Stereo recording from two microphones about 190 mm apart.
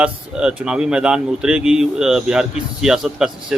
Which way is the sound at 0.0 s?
5° right (ahead or behind).